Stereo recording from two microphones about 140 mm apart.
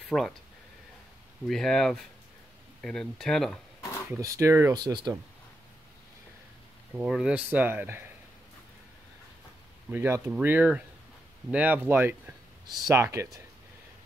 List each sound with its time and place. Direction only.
0.1 s speech: 10° left (ahead or behind)
1.5 s speech: 5° left (ahead or behind)
4.1 s speech: 20° right (ahead or behind)
4.7 s speech: 30° right (ahead or behind)
7.0 s speech: 5° right (ahead or behind)
9.8 s speech: 15° right (ahead or behind)